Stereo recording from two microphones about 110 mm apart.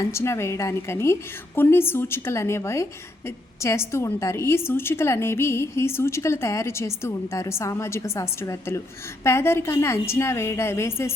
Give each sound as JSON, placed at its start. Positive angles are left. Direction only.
{"t": 0.0, "sound": "a woman's voice", "side_deg": 25}